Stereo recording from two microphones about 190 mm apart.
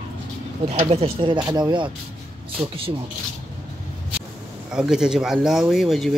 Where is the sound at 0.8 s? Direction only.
30° right (ahead or behind).